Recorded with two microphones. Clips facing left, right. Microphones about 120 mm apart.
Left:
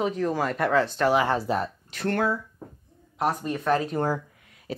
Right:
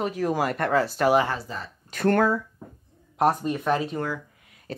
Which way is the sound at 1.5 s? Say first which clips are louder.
Left 10 dB; 75° left (ahead or behind).